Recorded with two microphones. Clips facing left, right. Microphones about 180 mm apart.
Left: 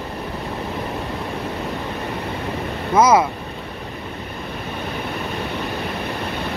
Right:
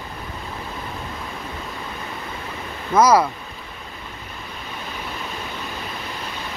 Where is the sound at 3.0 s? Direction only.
25° left (ahead or behind).